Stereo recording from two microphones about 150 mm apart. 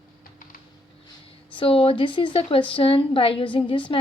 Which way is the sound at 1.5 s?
35° left (ahead or behind).